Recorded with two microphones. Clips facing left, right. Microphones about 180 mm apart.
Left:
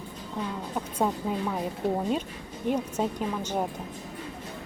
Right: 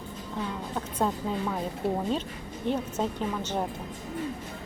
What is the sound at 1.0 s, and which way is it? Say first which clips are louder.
Speech: left 1 dB; 10° left (ahead or behind).